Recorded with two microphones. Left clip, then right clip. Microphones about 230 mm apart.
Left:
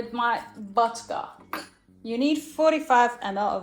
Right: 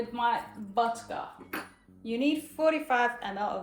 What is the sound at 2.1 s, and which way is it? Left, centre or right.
A woman's voice, left.